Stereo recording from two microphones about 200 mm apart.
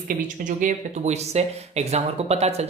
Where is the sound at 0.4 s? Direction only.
35° right (ahead or behind).